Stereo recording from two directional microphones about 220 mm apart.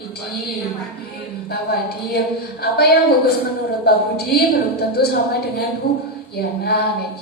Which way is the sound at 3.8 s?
45° left (ahead or behind).